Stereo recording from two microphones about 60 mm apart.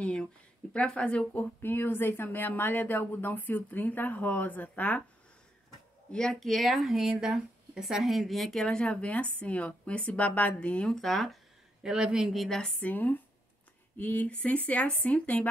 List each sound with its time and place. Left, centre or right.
0.0 s a woman's voice: centre
1.6 s speech: left
6.1 s speech: centre
6.5 s speech: centre
8.6 s a woman's voice: centre
11.0 s speech: centre
11.8 s speech: centre
12.4 s speech: centre
12.8 s a woman's voice: left